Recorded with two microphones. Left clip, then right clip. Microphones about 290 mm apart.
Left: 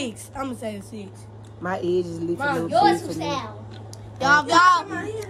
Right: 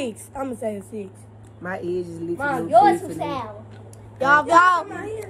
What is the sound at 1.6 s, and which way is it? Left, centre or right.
Speech, centre.